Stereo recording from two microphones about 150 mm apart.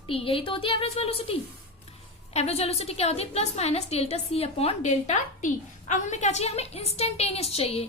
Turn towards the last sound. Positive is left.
turn(degrees=45)  # may be behind; listen again after turning